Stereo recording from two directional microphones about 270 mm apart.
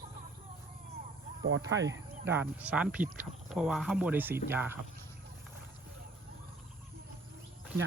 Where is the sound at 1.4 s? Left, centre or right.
Right.